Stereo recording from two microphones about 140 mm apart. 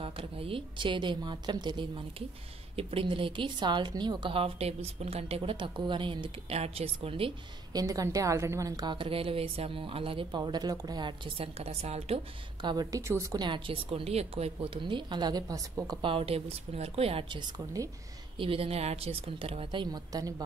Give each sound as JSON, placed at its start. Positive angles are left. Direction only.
{"t": 0.0, "sound": "a woman's voice", "side_deg": -40}
{"t": 2.7, "sound": "a woman's voice", "side_deg": -40}
{"t": 7.7, "sound": "a woman's voice", "side_deg": -25}
{"t": 8.9, "sound": "a woman's voice", "side_deg": -40}
{"t": 12.6, "sound": "a woman's voice", "side_deg": -25}
{"t": 16.0, "sound": "a woman's voice", "side_deg": -40}
{"t": 18.4, "sound": "a woman's voice", "side_deg": -40}